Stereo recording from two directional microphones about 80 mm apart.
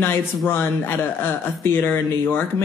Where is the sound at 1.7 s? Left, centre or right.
Left.